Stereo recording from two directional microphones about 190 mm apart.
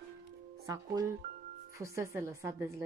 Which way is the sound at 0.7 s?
15° right (ahead or behind).